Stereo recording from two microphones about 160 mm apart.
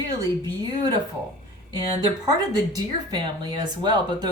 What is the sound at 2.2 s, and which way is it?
Speech, 25° right (ahead or behind).